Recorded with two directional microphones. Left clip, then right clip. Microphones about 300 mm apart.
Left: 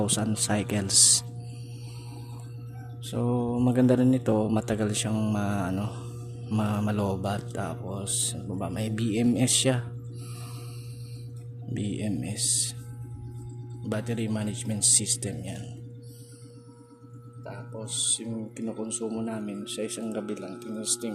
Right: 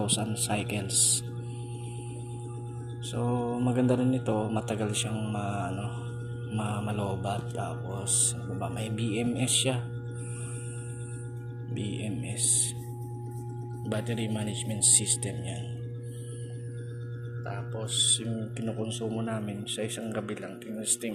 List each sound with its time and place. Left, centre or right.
0.0 s speech: left
3.2 s speech: left
11.8 s speech: left
13.9 s speech: centre
17.5 s speech: centre